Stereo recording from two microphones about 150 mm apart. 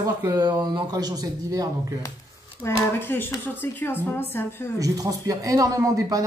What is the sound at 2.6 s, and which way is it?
Speech, 15° left (ahead or behind).